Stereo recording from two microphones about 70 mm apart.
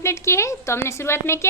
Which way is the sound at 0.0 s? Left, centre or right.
Left.